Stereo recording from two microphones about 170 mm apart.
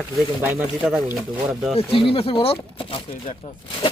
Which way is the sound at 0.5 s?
5° right (ahead or behind).